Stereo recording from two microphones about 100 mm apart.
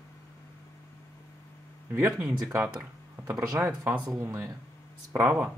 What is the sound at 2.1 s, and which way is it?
Speech, 5° right (ahead or behind).